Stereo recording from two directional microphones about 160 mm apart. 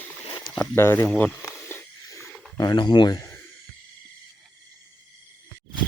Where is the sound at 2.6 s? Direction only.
25° left (ahead or behind).